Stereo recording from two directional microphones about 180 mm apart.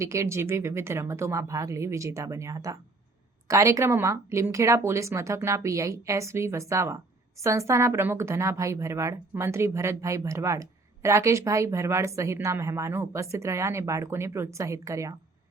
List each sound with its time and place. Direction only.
0.0 s a woman's voice: 15° right (ahead or behind)